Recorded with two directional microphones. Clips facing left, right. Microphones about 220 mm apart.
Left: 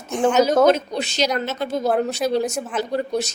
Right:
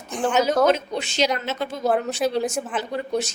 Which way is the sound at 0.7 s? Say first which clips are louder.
Left 3 dB; 40° left (ahead or behind).